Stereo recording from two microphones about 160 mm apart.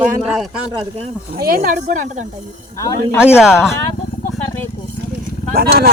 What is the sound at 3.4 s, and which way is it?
Speech, 5° right (ahead or behind).